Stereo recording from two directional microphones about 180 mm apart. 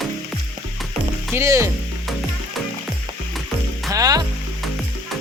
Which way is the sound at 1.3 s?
15° right (ahead or behind).